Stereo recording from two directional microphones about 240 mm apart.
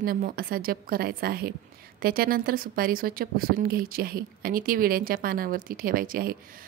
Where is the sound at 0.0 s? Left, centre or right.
Right.